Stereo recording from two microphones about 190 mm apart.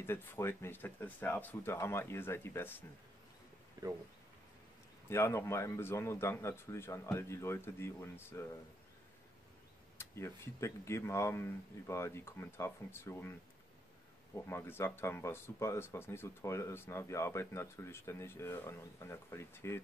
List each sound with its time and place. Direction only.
0.0 s speech: 10° left (ahead or behind)
3.8 s speech: 20° right (ahead or behind)
5.1 s speech: 15° left (ahead or behind)
9.9 s speech: 15° left (ahead or behind)
14.3 s speech: 10° left (ahead or behind)